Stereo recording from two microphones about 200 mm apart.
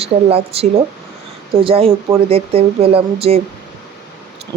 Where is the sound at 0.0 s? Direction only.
30° right (ahead or behind).